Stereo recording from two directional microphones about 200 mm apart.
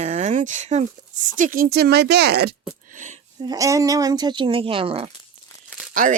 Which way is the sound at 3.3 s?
20° right (ahead or behind).